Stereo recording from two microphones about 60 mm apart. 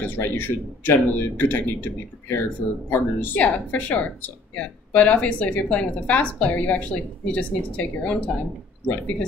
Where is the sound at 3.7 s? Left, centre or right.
Left.